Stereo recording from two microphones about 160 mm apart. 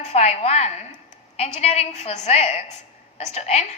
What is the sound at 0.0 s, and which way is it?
A woman's voice, 45° left (ahead or behind).